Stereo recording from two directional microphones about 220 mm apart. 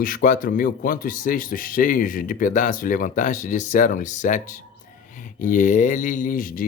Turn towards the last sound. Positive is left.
turn(degrees=40)  # may be behind; listen again after turning